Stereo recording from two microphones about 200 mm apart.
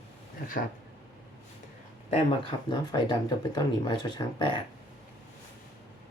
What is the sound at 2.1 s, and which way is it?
Speech, 25° left (ahead or behind).